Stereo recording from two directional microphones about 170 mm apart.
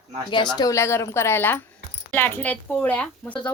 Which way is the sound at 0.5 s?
20° left (ahead or behind).